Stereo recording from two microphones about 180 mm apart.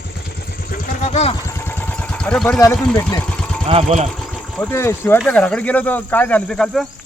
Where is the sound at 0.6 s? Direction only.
50° left (ahead or behind).